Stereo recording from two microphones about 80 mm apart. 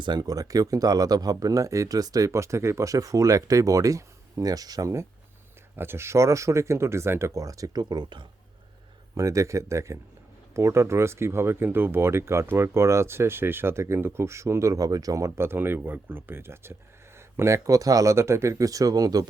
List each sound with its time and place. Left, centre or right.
0.0 s speech: right
5.7 s speech: right
9.1 s speech: right